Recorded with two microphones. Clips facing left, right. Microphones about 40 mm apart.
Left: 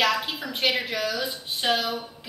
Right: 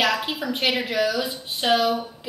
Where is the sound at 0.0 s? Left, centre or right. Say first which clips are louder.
Right 1 dB; centre.